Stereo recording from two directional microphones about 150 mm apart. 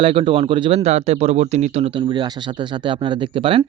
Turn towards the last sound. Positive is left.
turn(degrees=-35)  # may be behind; listen again after turning